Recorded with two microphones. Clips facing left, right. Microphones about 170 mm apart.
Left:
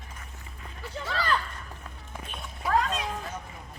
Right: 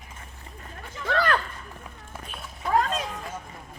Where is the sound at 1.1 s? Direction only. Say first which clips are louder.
Right 5 dB; 60° right (ahead or behind).